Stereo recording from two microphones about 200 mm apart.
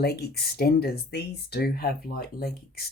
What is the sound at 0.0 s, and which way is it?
Speech, 50° left (ahead or behind).